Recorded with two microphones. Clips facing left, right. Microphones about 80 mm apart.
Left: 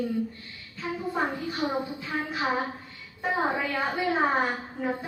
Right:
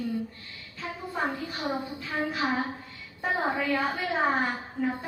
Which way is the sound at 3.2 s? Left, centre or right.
Centre.